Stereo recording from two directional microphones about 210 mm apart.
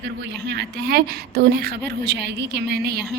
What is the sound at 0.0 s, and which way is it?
A woman's voice, 55° right (ahead or behind).